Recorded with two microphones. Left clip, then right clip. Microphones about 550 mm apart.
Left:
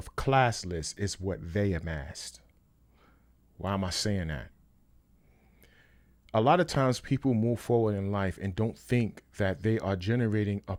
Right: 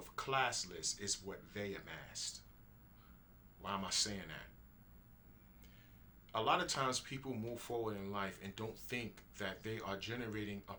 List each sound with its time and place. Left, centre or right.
0.2 s speech: left
3.6 s speech: left
6.2 s speech: left